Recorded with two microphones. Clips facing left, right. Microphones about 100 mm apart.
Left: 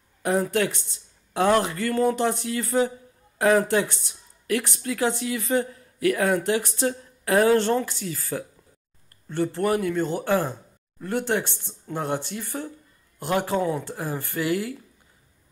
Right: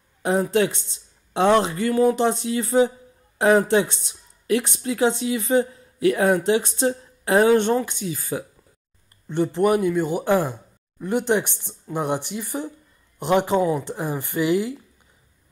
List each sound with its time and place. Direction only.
0.2 s speech: 20° right (ahead or behind)